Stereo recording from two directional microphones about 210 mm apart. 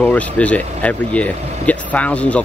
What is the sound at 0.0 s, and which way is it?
Speech, 5° left (ahead or behind).